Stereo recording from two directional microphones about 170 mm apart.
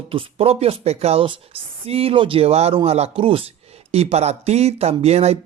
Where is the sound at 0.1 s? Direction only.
35° right (ahead or behind).